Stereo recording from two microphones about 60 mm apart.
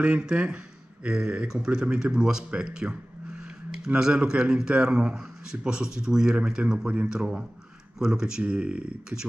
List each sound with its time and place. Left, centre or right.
0.0 s speech: centre